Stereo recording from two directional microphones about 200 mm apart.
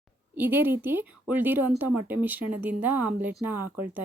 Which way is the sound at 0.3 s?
10° right (ahead or behind).